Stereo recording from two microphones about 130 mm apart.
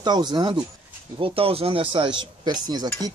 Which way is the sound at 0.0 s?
35° right (ahead or behind).